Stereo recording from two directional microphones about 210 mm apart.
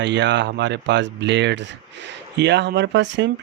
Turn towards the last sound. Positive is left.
turn(degrees=-60)  # may be behind; listen again after turning